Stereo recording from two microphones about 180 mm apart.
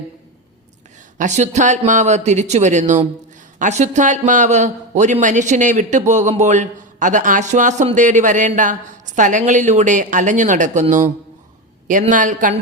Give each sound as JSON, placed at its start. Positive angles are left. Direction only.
{"t": 1.2, "sound": "a man's voice", "side_deg": -40}